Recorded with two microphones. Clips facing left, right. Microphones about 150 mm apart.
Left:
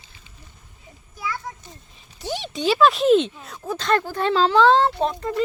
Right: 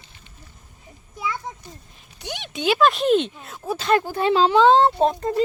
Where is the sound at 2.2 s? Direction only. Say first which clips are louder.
Left 1 dB; centre (ahead or behind).